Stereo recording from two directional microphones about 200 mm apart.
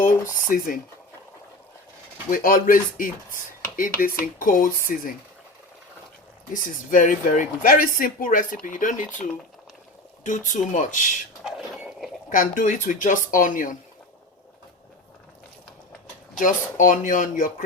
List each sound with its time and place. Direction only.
0.0 s speech: 45° left (ahead or behind)
2.3 s speech: 45° left (ahead or behind)
6.5 s speech: 40° left (ahead or behind)
10.2 s speech: 40° left (ahead or behind)
11.4 s a sound: centre (ahead or behind)
12.3 s speech: 45° left (ahead or behind)
16.4 s speech: 40° left (ahead or behind)